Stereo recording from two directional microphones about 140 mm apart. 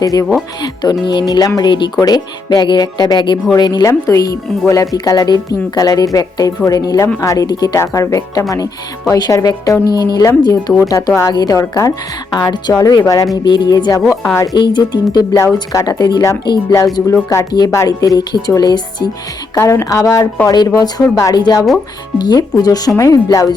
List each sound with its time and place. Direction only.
0.0 s speech: 25° left (ahead or behind)
13.3 s music: 30° left (ahead or behind)
15.1 s speech: 30° left (ahead or behind)